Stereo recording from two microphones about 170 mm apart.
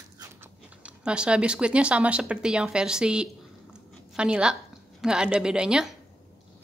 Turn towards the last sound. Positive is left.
turn(degrees=-5)  # may be behind; listen again after turning